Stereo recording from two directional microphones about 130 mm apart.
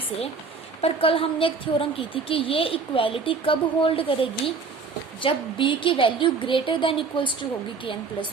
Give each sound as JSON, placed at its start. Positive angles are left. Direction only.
{"t": 0.8, "sound": "a woman's voice", "side_deg": 45}